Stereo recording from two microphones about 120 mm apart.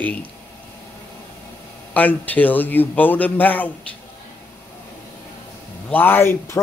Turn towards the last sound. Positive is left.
turn(degrees=20)  # may be behind; listen again after turning